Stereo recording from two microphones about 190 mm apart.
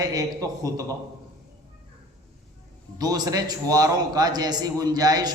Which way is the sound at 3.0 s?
20° right (ahead or behind).